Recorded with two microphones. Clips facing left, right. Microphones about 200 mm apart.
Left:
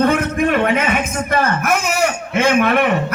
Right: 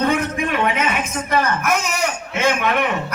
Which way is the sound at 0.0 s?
50° left (ahead or behind).